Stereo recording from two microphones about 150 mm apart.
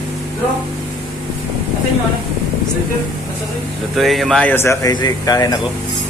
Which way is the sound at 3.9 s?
Centre (ahead or behind).